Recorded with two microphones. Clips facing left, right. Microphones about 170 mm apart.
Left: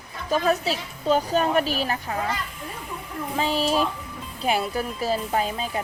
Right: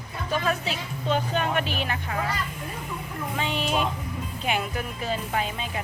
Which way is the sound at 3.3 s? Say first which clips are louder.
Left 4 dB; 35° left (ahead or behind).